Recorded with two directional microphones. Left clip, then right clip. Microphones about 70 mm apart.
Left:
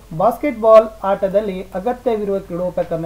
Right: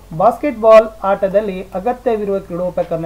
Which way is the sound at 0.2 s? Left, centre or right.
Centre.